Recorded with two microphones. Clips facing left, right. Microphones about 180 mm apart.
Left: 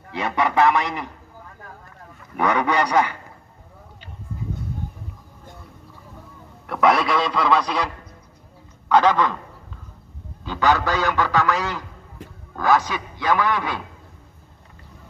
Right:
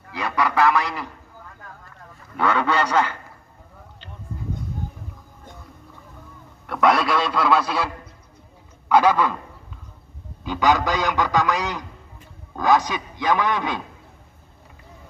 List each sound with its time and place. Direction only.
0.1 s a man's voice: 25° left (ahead or behind)
2.3 s a man's voice: 15° left (ahead or behind)
6.7 s a man's voice: centre (ahead or behind)
10.4 s a man's voice: 15° right (ahead or behind)